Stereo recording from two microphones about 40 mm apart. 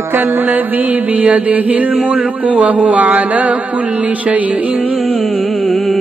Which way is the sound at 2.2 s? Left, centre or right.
Right.